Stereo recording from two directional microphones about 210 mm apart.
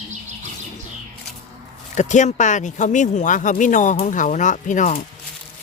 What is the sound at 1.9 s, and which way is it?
Speech, 35° left (ahead or behind).